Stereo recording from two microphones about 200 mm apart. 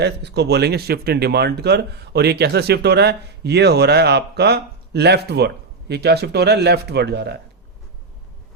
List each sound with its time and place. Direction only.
0.0 s speech: 55° right (ahead or behind)